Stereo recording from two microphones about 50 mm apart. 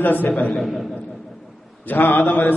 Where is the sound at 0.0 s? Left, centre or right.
Left.